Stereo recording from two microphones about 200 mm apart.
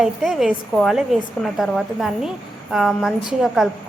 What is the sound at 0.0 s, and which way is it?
A woman's voice, centre (ahead or behind).